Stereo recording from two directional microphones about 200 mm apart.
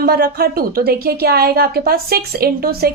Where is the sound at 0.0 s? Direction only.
50° right (ahead or behind).